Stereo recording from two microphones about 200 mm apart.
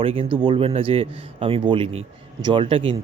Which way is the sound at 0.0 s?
25° right (ahead or behind).